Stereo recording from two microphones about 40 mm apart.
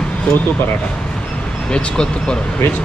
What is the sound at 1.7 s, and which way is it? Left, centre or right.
Speech, left.